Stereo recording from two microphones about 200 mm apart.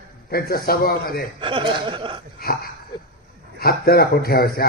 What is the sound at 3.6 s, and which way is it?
A man's voice, 50° left (ahead or behind).